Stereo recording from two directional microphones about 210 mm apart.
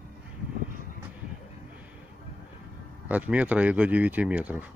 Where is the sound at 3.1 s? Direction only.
5° right (ahead or behind).